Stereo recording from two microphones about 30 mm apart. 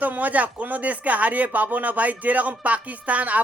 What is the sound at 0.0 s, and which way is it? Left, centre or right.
Speech, right.